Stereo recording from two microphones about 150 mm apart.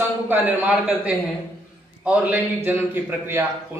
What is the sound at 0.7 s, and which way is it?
A man's voice, 10° right (ahead or behind).